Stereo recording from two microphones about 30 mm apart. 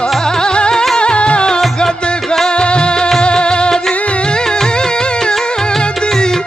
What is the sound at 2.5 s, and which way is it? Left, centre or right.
Music, left.